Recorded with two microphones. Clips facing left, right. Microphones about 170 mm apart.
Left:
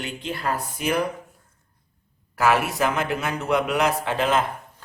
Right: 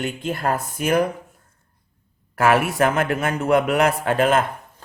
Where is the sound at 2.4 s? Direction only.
55° right (ahead or behind).